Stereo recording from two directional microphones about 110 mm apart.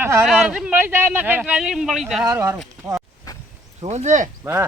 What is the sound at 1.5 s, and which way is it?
Speech, 5° right (ahead or behind).